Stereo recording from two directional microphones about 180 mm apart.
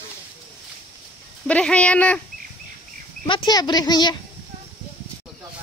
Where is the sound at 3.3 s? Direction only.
25° left (ahead or behind).